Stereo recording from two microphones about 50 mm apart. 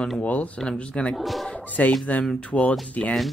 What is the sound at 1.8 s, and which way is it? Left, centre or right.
Speech, left.